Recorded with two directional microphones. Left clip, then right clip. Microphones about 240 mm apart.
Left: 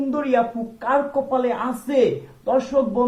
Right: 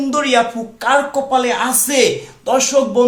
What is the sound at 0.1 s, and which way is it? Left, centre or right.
Speech, centre.